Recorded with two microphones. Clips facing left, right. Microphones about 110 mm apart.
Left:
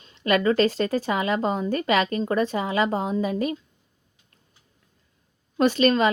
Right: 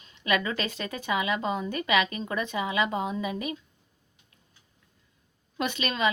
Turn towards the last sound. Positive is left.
turn(degrees=40)  # may be behind; listen again after turning